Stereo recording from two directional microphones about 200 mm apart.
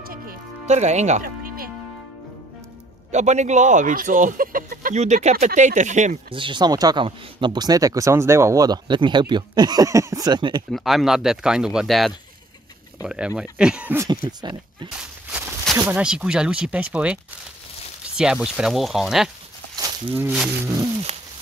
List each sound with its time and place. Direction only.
0.7 s speech: 35° right (ahead or behind)
3.1 s speech: 35° right (ahead or behind)
6.3 s speech: 25° right (ahead or behind)
10.7 s speech: centre (ahead or behind)
15.3 s a sound: centre (ahead or behind)
15.9 s speech: 5° right (ahead or behind)
19.7 s livestock: 15° right (ahead or behind)